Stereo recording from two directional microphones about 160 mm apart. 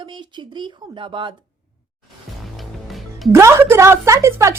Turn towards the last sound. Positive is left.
turn(degrees=-20)  # may be behind; listen again after turning